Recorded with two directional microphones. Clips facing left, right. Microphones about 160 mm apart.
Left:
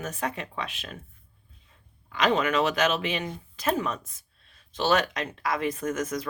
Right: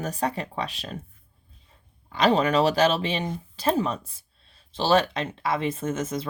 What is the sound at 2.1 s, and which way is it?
Speech, 35° right (ahead or behind).